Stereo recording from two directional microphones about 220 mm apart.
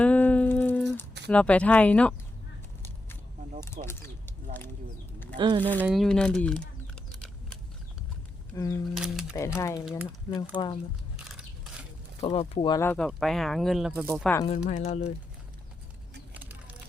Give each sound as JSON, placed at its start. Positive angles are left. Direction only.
{"t": 0.0, "sound": "humming", "side_deg": 5}
{"t": 1.3, "sound": "speech", "side_deg": 5}
{"t": 3.8, "sound": "speech", "side_deg": -25}
{"t": 5.4, "sound": "speech", "side_deg": -20}
{"t": 5.8, "sound": "speech", "side_deg": 0}
{"t": 8.5, "sound": "speech", "side_deg": 15}
{"t": 9.0, "sound": "speech", "side_deg": 0}
{"t": 9.6, "sound": "speech", "side_deg": 15}
{"t": 11.3, "sound": "biting", "side_deg": -5}
{"t": 12.2, "sound": "speech", "side_deg": 25}
{"t": 14.4, "sound": "speech", "side_deg": 30}
{"t": 16.3, "sound": "a sound", "side_deg": -10}